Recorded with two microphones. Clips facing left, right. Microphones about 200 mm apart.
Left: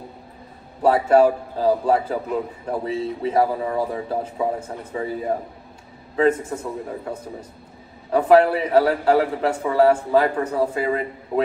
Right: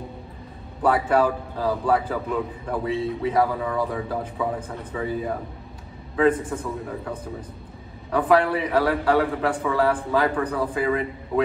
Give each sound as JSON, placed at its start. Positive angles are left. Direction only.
{"t": 0.8, "sound": "a man's voice", "side_deg": 25}
{"t": 6.5, "sound": "a man's voice", "side_deg": 25}